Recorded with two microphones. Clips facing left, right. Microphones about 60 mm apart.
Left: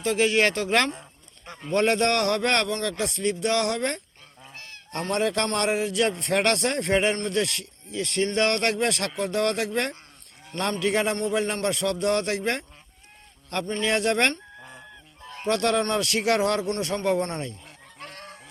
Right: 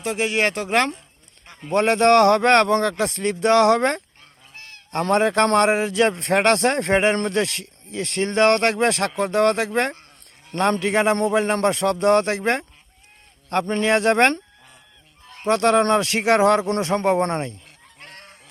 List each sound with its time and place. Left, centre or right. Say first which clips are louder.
0.0 s speech: even; centre
1.7 s speech: right 6 dB; right
5.1 s speech: right 8 dB; right
13.8 s speech: right 6 dB; right
15.4 s speech: right 6 dB; right